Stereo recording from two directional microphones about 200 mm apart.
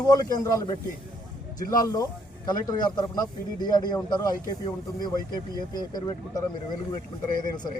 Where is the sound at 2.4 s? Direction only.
20° left (ahead or behind).